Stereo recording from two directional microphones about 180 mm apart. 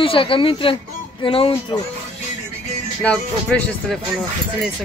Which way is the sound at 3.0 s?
5° left (ahead or behind).